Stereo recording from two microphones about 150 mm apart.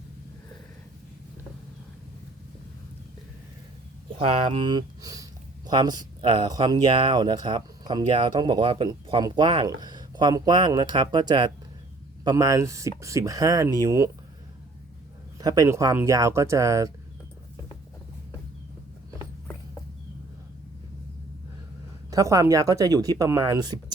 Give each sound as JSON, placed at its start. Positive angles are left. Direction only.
{"t": 4.5, "sound": "speech", "side_deg": -30}
{"t": 15.4, "sound": "speech", "side_deg": -25}
{"t": 22.1, "sound": "speech", "side_deg": -20}